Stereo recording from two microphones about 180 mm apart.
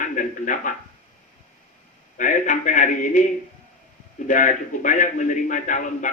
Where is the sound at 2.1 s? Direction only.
45° left (ahead or behind).